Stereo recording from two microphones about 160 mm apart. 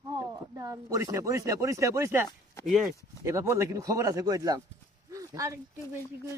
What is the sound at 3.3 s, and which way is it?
Speech, 20° right (ahead or behind).